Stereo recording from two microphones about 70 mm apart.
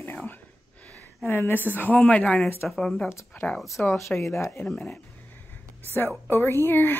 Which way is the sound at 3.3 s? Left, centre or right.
Left.